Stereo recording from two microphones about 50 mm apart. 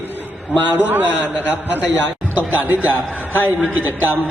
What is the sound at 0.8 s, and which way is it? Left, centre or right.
A man's voice, right.